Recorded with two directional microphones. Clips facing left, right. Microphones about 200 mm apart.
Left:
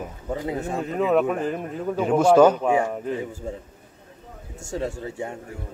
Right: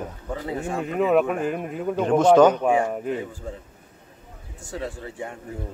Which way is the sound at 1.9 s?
5° left (ahead or behind).